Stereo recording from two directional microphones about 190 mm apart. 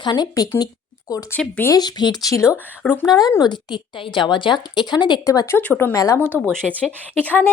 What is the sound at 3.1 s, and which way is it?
A woman's voice, 20° left (ahead or behind).